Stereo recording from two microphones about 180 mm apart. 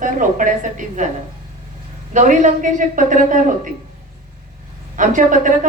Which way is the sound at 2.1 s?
45° right (ahead or behind).